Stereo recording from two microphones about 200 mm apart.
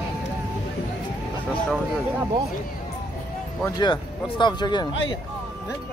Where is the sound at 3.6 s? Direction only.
20° left (ahead or behind).